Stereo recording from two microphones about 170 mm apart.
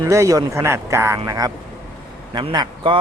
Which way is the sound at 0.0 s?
20° right (ahead or behind).